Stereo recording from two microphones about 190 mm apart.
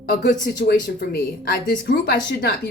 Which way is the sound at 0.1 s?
50° left (ahead or behind).